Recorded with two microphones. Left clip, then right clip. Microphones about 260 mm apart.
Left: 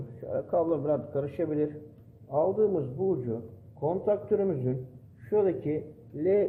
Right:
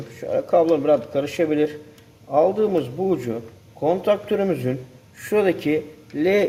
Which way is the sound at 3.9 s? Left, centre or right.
Right.